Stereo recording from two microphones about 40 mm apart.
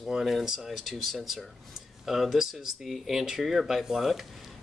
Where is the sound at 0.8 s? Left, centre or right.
Centre.